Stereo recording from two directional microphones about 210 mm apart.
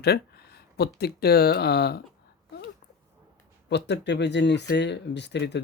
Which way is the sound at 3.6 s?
55° left (ahead or behind).